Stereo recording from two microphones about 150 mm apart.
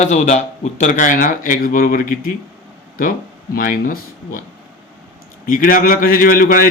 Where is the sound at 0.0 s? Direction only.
50° left (ahead or behind).